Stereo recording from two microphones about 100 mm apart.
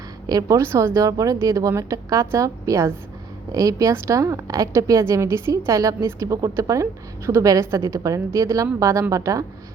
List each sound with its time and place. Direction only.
0.3 s a woman's voice: 40° right (ahead or behind)